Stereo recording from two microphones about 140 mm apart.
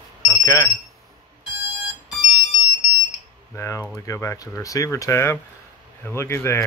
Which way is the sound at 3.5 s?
20° left (ahead or behind).